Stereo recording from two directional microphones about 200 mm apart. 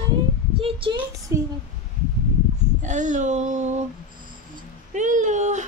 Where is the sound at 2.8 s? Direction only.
40° right (ahead or behind).